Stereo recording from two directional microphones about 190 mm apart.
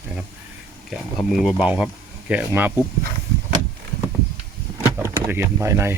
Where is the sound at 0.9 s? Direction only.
Centre (ahead or behind).